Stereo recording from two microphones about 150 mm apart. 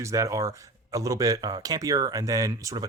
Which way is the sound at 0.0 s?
20° right (ahead or behind).